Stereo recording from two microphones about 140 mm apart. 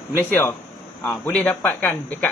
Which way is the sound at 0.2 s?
15° left (ahead or behind).